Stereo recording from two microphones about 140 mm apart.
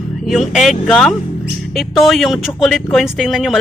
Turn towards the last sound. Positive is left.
turn(degrees=0)  # may be behind; listen again after turning